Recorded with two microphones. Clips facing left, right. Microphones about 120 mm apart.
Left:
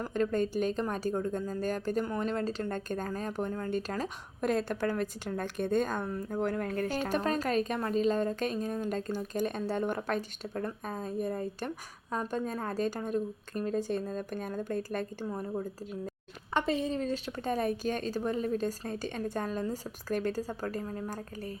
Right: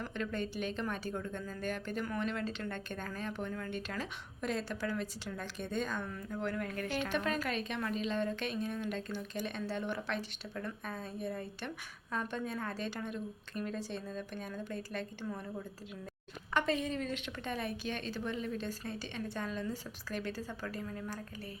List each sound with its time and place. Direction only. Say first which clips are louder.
0.0 s a woman's voice: left 8 dB; 40° left (ahead or behind)
16.6 s speech: left 3 dB; 30° left (ahead or behind)